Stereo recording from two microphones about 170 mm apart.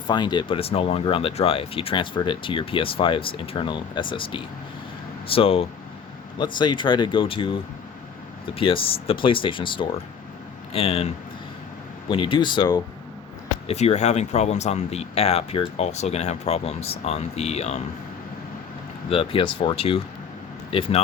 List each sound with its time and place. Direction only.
0.1 s speech: 25° left (ahead or behind)
13.7 s speech: 40° left (ahead or behind)
19.0 s speech: 35° left (ahead or behind)